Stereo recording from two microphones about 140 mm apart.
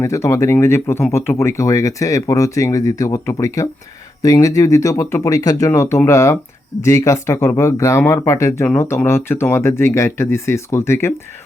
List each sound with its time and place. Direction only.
0.0 s speech: 20° left (ahead or behind)